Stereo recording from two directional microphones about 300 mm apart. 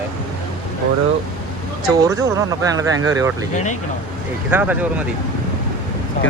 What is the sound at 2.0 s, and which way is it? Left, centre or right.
Speech, centre.